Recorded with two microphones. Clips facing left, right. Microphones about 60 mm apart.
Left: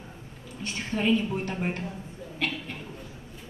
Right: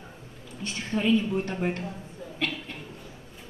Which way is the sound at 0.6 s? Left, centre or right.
Left.